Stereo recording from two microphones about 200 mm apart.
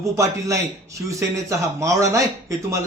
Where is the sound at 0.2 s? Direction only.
15° right (ahead or behind).